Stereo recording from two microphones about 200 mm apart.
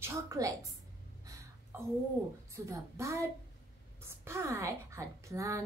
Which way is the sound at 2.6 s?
15° right (ahead or behind).